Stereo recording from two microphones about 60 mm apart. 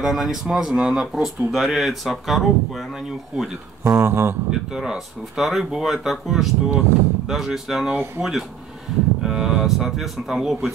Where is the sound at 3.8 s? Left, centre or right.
Right.